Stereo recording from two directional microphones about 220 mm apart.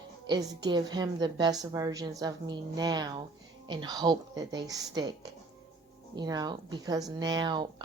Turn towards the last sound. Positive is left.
turn(degrees=-20)  # may be behind; listen again after turning